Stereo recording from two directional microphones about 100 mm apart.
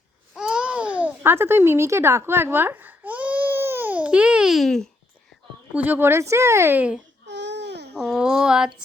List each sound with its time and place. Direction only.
0.3 s babbling: 10° right (ahead or behind)
5.7 s speech: 20° right (ahead or behind)
8.0 s a sound: 5° right (ahead or behind)